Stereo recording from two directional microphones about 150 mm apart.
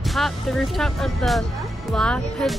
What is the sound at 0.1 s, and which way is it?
Speech, centre (ahead or behind).